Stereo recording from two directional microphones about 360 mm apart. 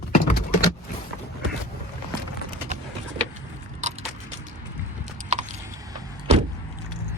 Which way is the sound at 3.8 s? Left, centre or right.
Centre.